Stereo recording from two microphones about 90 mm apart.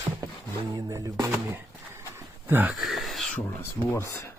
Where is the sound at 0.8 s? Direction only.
40° right (ahead or behind).